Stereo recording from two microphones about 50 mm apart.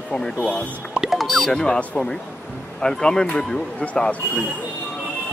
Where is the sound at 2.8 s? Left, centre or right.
Centre.